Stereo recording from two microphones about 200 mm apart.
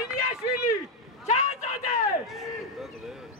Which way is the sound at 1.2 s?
35° left (ahead or behind).